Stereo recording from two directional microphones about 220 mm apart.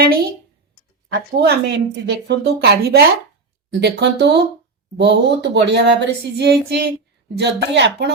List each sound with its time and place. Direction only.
1.1 s speech: 50° right (ahead or behind)